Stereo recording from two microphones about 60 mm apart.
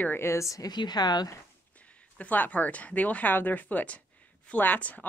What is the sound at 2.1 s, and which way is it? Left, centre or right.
A woman's voice, left.